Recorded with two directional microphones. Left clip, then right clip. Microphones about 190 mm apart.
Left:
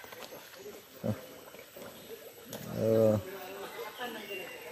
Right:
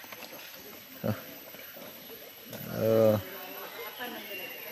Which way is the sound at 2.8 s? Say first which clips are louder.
Right 3 dB; centre (ahead or behind).